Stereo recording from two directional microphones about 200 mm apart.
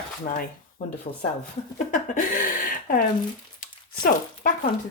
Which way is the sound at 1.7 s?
40° left (ahead or behind).